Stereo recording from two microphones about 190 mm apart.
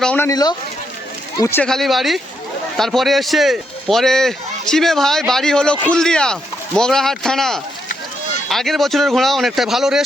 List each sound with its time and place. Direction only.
0.0 s speech: 5° left (ahead or behind)
0.3 s speech: 20° left (ahead or behind)
1.6 s speech: centre (ahead or behind)